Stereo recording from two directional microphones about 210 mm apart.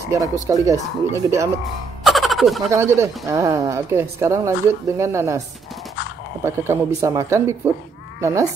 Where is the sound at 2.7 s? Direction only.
15° right (ahead or behind).